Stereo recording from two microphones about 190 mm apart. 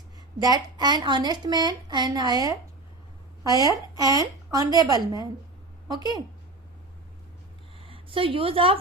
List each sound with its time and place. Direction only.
0.4 s speech: 20° right (ahead or behind)
7.9 s a woman's voice: 30° right (ahead or behind)